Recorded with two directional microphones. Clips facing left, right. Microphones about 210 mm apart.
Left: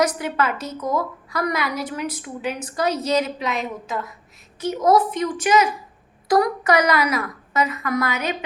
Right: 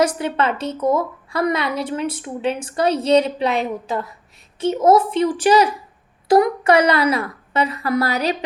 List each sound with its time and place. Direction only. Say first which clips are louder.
0.0 s a woman's voice: right 3 dB; 30° right (ahead or behind)